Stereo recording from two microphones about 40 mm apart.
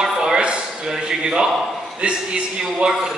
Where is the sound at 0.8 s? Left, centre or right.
Centre.